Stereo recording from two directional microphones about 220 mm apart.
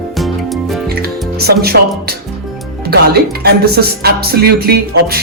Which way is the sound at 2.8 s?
45° right (ahead or behind).